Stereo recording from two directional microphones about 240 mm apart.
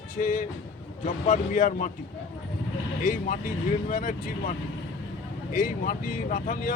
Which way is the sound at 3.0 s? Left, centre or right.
Left.